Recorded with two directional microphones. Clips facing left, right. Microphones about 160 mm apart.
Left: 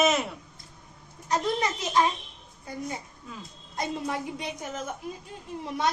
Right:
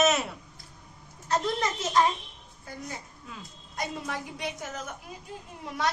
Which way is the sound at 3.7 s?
25° left (ahead or behind).